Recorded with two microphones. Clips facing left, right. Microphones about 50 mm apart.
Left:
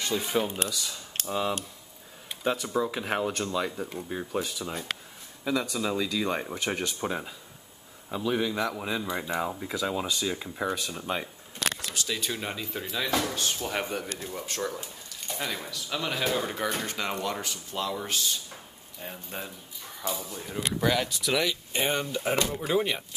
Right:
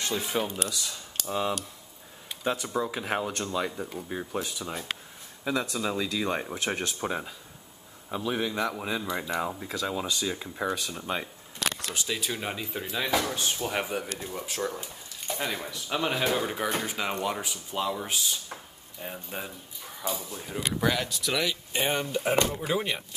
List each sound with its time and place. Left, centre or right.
0.0 s speech: centre
2.4 s speech: centre
15.7 s speech: centre
16.3 s speech: centre